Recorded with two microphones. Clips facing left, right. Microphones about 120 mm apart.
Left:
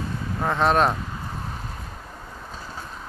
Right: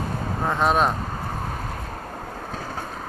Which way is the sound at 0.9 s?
50° right (ahead or behind).